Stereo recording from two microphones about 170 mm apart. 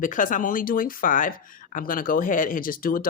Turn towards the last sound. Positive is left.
turn(degrees=55)  # may be behind; listen again after turning